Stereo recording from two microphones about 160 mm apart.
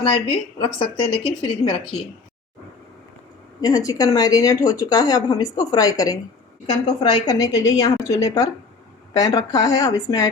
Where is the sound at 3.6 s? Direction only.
20° left (ahead or behind).